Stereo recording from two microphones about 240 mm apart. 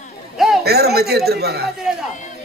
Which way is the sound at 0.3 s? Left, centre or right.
Centre.